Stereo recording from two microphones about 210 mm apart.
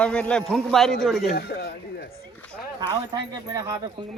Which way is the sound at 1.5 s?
50° left (ahead or behind).